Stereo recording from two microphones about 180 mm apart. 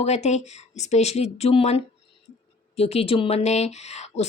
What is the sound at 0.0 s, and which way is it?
Speech, 40° left (ahead or behind).